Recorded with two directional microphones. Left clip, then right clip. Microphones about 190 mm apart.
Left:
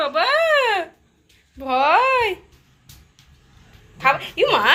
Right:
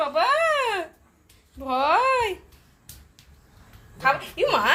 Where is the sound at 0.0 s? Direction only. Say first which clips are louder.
Left 3 dB; 5° right (ahead or behind).